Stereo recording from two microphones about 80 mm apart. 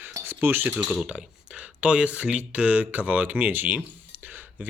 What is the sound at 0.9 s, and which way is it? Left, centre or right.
Speech, centre.